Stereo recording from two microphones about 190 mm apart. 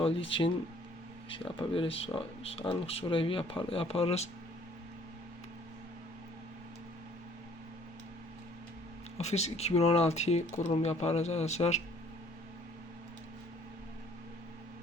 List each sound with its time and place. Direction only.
0.0 s speech: 30° left (ahead or behind)
9.1 s speech: 35° left (ahead or behind)